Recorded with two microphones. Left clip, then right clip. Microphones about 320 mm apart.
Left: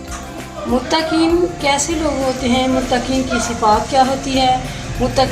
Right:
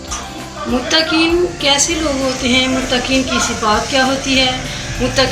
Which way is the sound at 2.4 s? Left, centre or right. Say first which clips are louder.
Right 3 dB; left.